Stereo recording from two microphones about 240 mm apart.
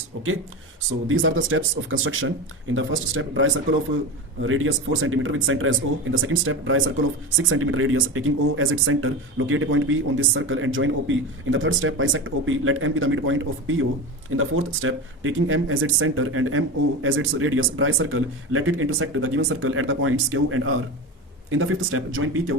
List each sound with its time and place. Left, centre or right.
1.0 s speech: right